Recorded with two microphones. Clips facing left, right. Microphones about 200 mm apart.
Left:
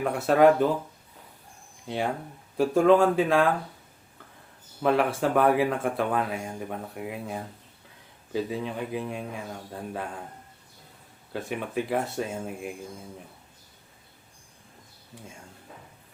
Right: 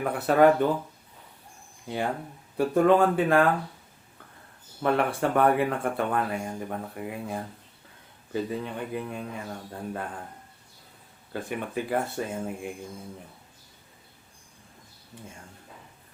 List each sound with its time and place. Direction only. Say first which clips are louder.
0.0 s speech: left 1 dB; centre (ahead or behind)
2.6 s speech: left 1 dB; centre (ahead or behind)
4.8 s speech: left 1 dB; centre (ahead or behind)
11.3 s speech: even; centre (ahead or behind)